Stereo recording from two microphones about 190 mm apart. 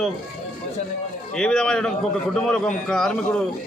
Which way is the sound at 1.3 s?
5° left (ahead or behind).